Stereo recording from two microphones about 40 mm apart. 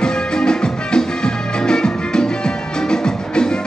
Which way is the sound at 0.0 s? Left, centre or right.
Centre.